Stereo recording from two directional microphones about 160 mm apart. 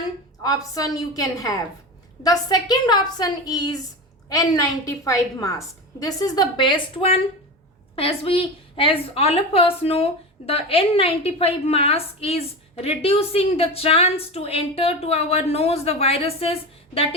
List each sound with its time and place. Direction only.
0.4 s a woman's voice: 20° left (ahead or behind); by 17.2 s 40° left (ahead or behind)